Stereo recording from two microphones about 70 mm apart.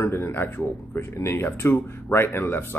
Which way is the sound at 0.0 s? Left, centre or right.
Left.